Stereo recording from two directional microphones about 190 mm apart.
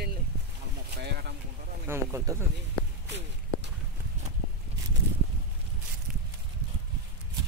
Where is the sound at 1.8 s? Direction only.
15° right (ahead or behind).